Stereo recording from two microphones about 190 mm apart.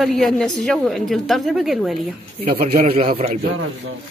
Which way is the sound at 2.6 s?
35° right (ahead or behind).